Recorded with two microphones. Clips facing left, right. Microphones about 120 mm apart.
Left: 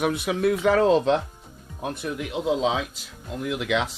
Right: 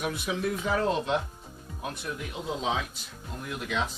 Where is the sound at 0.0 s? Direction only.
65° left (ahead or behind); by 1.1 s 90° left.